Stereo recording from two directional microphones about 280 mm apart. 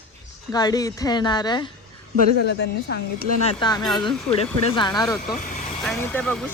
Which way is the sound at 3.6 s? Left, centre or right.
Centre.